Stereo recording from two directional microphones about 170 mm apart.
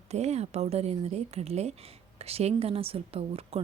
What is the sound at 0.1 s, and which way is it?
Speech, 40° right (ahead or behind).